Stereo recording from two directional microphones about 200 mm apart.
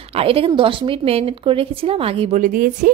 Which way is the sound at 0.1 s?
30° right (ahead or behind).